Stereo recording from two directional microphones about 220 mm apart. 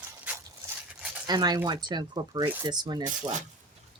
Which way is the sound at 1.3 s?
20° right (ahead or behind).